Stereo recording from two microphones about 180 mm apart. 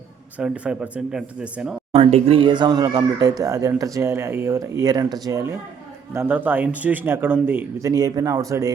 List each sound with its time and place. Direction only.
0.3 s speech: 5° right (ahead or behind)
1.9 s speech: 35° right (ahead or behind); by 8.7 s 20° right (ahead or behind)